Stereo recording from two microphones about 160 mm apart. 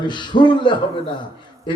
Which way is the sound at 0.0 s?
30° left (ahead or behind).